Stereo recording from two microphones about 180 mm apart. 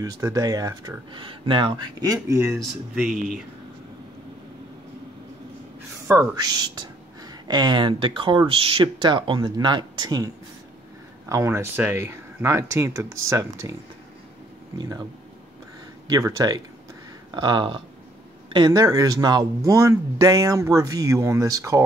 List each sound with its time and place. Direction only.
0.0 s speech: 20° right (ahead or behind)
3.0 s speech: centre (ahead or behind)
6.0 s speech: 20° right (ahead or behind)
14.8 s speech: 20° right (ahead or behind)
16.1 s speech: 20° right (ahead or behind)